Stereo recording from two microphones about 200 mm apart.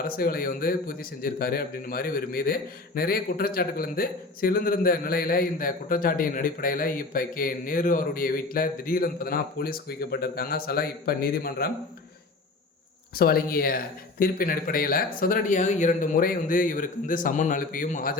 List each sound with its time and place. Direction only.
0.0 s speech: 45° left (ahead or behind)
13.1 s speech: 50° left (ahead or behind)